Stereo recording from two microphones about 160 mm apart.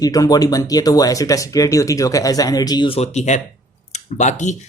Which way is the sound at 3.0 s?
45° left (ahead or behind).